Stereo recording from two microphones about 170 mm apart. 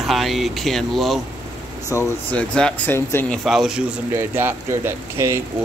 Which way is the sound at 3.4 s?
Centre (ahead or behind).